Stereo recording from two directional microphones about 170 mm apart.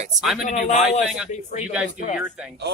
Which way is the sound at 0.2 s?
Centre (ahead or behind).